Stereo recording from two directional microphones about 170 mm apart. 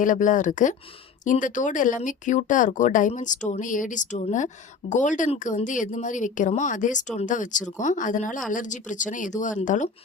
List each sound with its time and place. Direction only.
0.0 s speech: 50° left (ahead or behind)